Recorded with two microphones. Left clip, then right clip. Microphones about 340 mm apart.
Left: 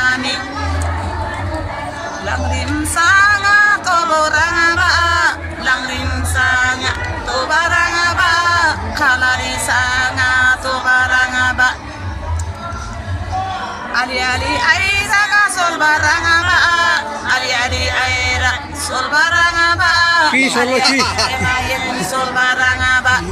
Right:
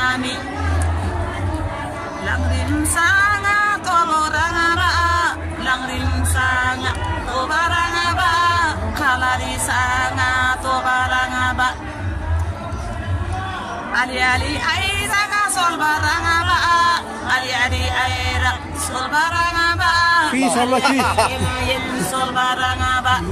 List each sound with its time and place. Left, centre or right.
3.0 s music: centre
13.9 s speech: centre
20.8 s speech: right
22.3 s speech: centre